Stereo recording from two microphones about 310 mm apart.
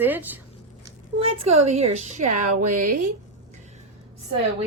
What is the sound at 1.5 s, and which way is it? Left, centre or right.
A woman's voice, right.